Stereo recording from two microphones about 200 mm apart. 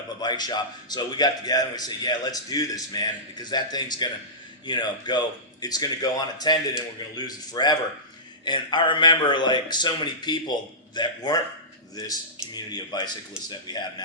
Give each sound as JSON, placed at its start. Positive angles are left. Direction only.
{"t": 0.2, "sound": "a man's voice", "side_deg": 20}
{"t": 12.5, "sound": "a man's voice", "side_deg": 20}